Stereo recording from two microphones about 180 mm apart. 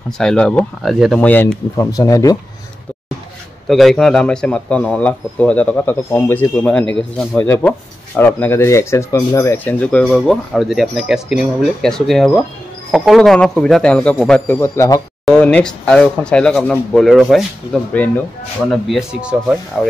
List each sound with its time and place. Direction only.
0.2 s speech: 5° left (ahead or behind)
1.8 s speech: 20° left (ahead or behind)
3.6 s speech: centre (ahead or behind)
17.9 s speech: 10° left (ahead or behind)
18.7 s speech: centre (ahead or behind)